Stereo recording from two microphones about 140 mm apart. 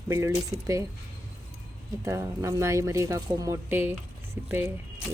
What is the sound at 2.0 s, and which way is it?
Speech, 20° right (ahead or behind).